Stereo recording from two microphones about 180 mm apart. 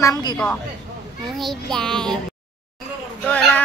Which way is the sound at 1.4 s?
Centre (ahead or behind).